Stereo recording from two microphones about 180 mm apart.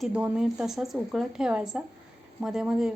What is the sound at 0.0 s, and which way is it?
A woman's voice, 5° right (ahead or behind).